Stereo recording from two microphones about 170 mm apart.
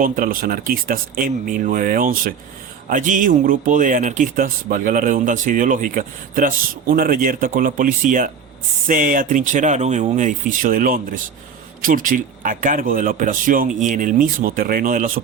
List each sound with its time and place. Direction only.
0.0 s speech: 55° right (ahead or behind)